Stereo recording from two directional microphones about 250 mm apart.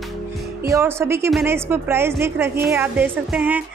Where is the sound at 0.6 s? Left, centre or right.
Centre.